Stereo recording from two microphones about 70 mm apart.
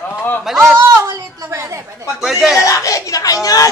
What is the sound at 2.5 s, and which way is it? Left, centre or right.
Speech, left.